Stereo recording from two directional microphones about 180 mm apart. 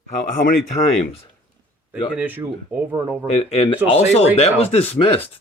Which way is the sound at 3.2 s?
35° left (ahead or behind).